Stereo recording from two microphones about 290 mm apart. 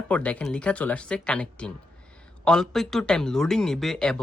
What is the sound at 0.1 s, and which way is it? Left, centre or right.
Speech, centre.